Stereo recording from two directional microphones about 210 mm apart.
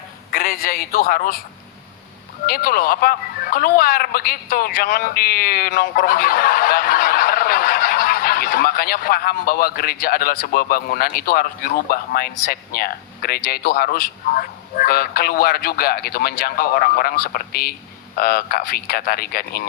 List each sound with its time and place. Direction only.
0.3 s a man's voice: 45° left (ahead or behind)
2.5 s speech: 45° left (ahead or behind)